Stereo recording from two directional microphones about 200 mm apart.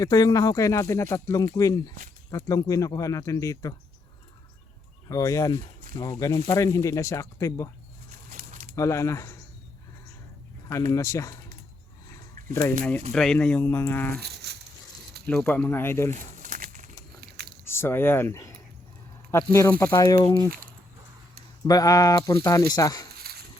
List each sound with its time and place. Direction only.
0.0 s speech: 20° left (ahead or behind)
5.0 s speech: 15° left (ahead or behind)
8.7 s speech: 15° left (ahead or behind)
10.7 s speech: 15° left (ahead or behind)
13.1 s speech: 5° left (ahead or behind)
14.4 s stir: 55° right (ahead or behind)
15.3 s speech: 5° left (ahead or behind)
16.1 s crumpling: 40° right (ahead or behind)
17.7 s speech: 10° left (ahead or behind)
21.6 s speech: 20° left (ahead or behind)
23.3 s a sound: 50° right (ahead or behind)